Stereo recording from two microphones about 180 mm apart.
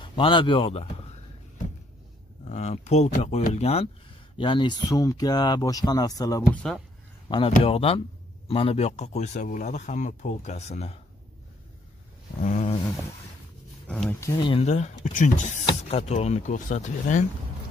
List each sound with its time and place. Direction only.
0.0 s a man's voice: 30° left (ahead or behind)
2.4 s speech: 40° left (ahead or behind); by 6.4 s 20° left (ahead or behind)
6.5 s speech: 5° left (ahead or behind)
7.2 s speech: 30° left (ahead or behind)
12.4 s speech: 40° left (ahead or behind)
13.8 s speech: 5° left (ahead or behind)
14.2 s speech: 25° left (ahead or behind); by 17.3 s 40° left (ahead or behind)